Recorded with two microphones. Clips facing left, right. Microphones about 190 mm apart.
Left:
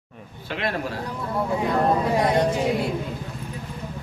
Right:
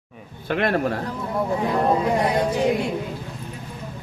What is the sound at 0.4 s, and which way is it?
Speech, 50° right (ahead or behind).